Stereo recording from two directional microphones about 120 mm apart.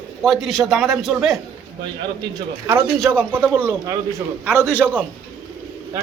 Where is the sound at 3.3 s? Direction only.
15° right (ahead or behind).